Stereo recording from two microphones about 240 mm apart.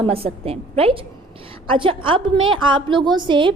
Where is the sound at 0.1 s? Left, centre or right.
Right.